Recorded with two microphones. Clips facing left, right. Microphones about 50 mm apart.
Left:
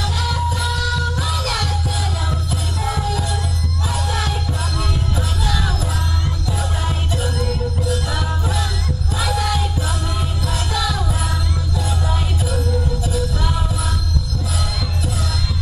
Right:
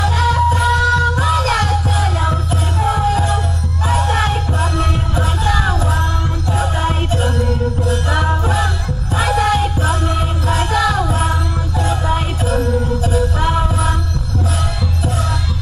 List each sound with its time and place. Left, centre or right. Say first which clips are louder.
0.0 s music: right 8 dB; right